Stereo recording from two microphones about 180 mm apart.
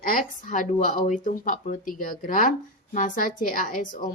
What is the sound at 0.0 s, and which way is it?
Speech, 50° left (ahead or behind).